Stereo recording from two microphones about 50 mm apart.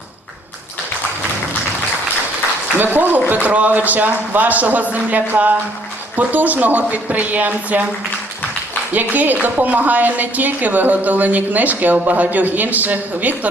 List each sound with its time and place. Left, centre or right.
2.7 s a woman's voice: right
8.9 s a woman's voice: right